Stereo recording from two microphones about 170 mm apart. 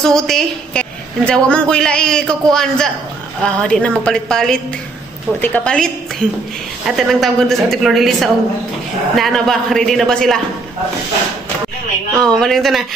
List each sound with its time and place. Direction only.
0.0 s a woman's voice: centre (ahead or behind)
12.2 s a woman's voice: 5° left (ahead or behind)